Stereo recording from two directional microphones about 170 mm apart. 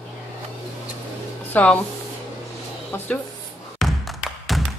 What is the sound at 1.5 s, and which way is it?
Speech, 10° left (ahead or behind).